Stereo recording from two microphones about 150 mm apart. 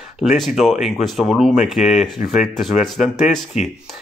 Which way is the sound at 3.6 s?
50° left (ahead or behind).